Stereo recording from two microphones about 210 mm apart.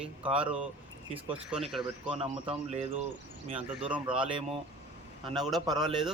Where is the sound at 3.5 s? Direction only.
5° right (ahead or behind).